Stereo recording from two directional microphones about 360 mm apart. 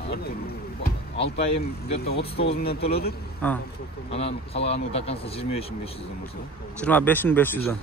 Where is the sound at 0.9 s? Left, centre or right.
Left.